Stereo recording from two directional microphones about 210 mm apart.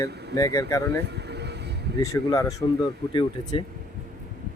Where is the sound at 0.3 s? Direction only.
15° left (ahead or behind).